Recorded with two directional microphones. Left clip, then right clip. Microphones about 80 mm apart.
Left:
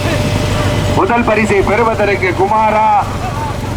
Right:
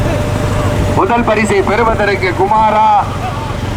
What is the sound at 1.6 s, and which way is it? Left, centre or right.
Speech, centre.